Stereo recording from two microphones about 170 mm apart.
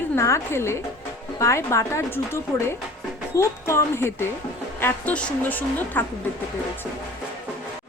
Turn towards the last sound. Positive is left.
turn(degrees=10)  # may be behind; listen again after turning